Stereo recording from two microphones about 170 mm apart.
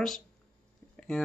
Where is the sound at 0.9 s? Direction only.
5° left (ahead or behind).